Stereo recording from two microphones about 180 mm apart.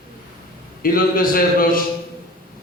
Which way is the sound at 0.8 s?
50° left (ahead or behind).